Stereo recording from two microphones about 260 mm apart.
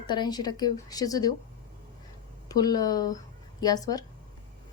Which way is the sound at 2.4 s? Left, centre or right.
Centre.